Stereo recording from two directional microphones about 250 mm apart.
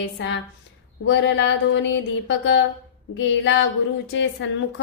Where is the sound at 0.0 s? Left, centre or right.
Left.